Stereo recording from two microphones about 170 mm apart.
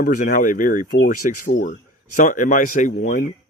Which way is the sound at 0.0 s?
50° left (ahead or behind).